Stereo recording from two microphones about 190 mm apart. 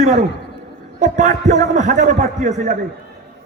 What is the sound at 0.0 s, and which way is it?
A man's voice, 40° right (ahead or behind).